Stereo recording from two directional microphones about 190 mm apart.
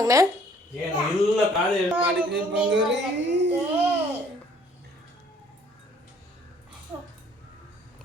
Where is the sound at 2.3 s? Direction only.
65° right (ahead or behind).